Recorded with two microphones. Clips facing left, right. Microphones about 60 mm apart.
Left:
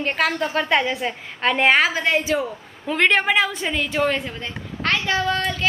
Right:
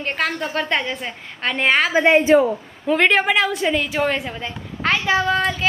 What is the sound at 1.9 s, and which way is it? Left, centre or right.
Speech, right.